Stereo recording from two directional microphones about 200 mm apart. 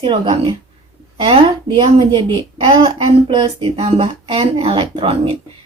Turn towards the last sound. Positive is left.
turn(degrees=-25)  # may be behind; listen again after turning